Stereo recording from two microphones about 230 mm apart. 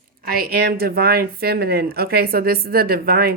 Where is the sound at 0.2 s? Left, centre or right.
Right.